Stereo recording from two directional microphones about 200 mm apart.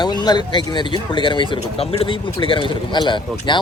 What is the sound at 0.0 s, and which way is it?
Speech, 20° left (ahead or behind).